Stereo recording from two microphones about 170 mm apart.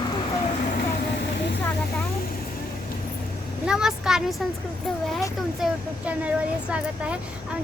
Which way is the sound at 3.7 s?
5° right (ahead or behind).